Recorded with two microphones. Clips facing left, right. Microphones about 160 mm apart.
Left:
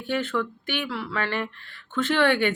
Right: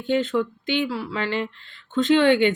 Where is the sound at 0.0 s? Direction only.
20° right (ahead or behind).